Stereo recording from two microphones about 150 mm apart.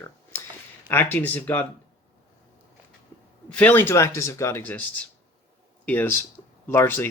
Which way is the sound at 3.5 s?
10° left (ahead or behind).